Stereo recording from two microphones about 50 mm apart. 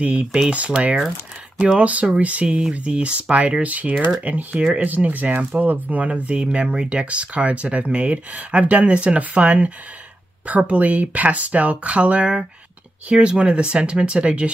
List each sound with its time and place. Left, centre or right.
0.0 s speech: right